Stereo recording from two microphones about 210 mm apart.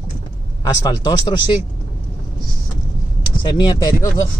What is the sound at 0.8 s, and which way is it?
Speech, 20° left (ahead or behind).